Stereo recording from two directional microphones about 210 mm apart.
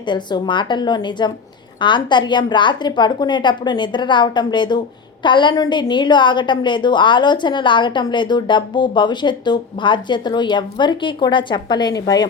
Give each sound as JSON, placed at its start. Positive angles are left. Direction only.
{"t": 0.1, "sound": "a woman's voice", "side_deg": 20}